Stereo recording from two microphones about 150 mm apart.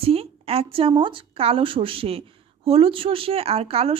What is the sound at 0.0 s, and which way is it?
Speech, 40° right (ahead or behind).